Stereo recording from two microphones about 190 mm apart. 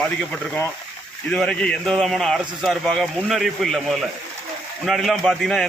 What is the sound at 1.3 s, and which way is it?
A man's voice, 5° left (ahead or behind).